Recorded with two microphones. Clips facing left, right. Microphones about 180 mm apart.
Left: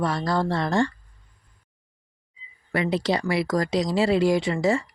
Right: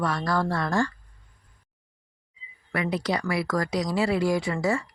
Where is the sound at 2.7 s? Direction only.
25° left (ahead or behind).